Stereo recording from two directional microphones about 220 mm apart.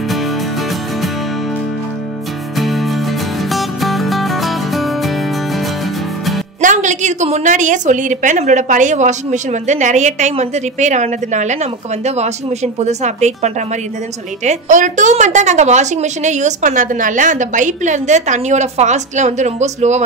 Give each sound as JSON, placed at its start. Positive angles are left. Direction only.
{"t": 2.5, "sound": "music", "side_deg": 0}
{"t": 6.6, "sound": "a woman's voice", "side_deg": -35}